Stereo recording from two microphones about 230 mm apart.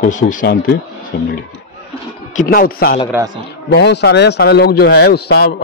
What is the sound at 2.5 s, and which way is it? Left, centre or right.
A man's voice, left.